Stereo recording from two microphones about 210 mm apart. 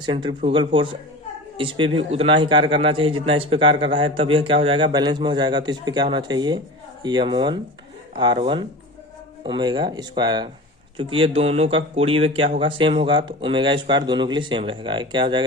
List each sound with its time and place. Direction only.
0.0 s a man's voice: 20° right (ahead or behind)